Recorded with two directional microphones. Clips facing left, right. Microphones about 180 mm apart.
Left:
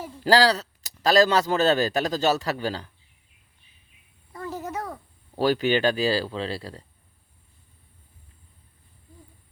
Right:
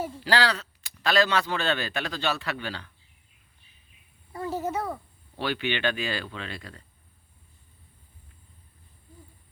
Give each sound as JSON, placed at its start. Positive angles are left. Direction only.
{"t": 0.3, "sound": "speech", "side_deg": 40}
{"t": 4.6, "sound": "a child's voice", "side_deg": -5}
{"t": 5.4, "sound": "speech", "side_deg": 40}